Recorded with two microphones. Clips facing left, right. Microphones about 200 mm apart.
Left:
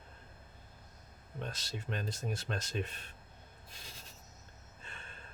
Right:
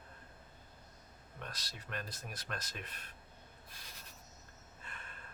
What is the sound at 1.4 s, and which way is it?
Speech, 25° left (ahead or behind).